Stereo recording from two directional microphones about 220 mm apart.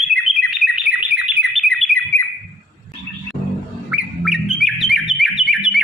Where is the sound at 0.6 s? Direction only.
Centre (ahead or behind).